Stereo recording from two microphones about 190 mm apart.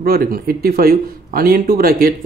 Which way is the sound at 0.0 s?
50° right (ahead or behind).